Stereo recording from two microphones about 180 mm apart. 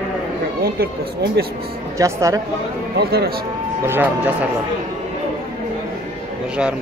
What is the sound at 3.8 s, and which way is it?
Speech, 10° right (ahead or behind).